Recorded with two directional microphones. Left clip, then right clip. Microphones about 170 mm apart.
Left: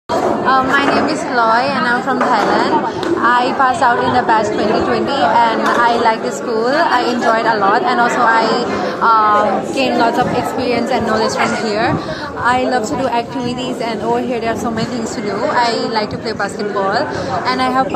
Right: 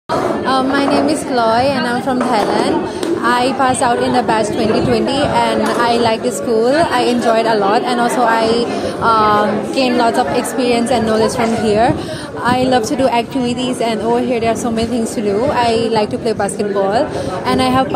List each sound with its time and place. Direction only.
0.9 s a woman's voice: 45° right (ahead or behind)
15.5 s a woman's voice: 50° right (ahead or behind)
17.5 s speech: 55° right (ahead or behind)